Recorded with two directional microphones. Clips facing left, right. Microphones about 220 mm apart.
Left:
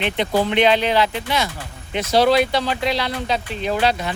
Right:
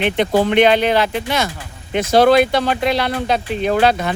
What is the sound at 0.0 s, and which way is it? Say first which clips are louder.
Speech: right 4 dB; 55° right (ahead or behind).